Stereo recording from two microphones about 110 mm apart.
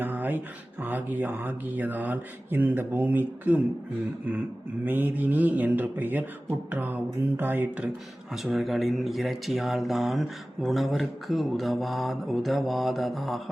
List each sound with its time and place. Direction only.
0.0 s speech: 15° right (ahead or behind)
4.9 s speech: 15° right (ahead or behind)
8.5 s speech: centre (ahead or behind)